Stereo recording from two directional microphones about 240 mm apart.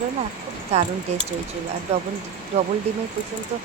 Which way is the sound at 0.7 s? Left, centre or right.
Right.